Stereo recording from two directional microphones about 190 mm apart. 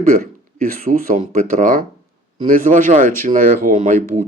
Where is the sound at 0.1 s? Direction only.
45° right (ahead or behind).